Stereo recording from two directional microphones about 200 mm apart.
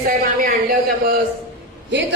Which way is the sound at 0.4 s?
45° right (ahead or behind).